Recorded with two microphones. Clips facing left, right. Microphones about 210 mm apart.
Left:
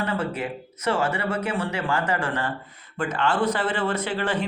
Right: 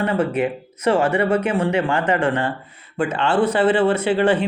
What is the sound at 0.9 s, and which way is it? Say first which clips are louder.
Speech: right 7 dB; 30° right (ahead or behind).